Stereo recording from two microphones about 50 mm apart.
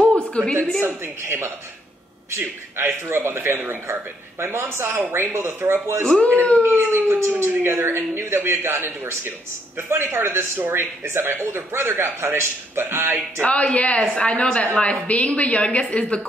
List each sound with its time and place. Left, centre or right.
0.0 s a sound: left
0.8 s speech: right
3.8 s speech: right
7.2 s speech: right
13.4 s a woman's voice: left